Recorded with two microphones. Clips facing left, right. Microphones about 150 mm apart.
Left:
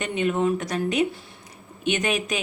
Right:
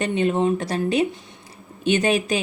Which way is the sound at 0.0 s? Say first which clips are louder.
Right 3 dB; 30° right (ahead or behind).